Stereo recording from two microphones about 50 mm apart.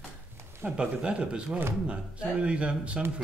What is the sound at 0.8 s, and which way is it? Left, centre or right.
Speech, right.